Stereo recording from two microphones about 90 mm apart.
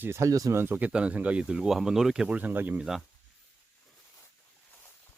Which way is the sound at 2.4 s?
20° right (ahead or behind).